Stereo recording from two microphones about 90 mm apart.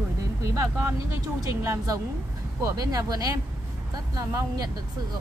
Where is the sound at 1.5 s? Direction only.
35° right (ahead or behind).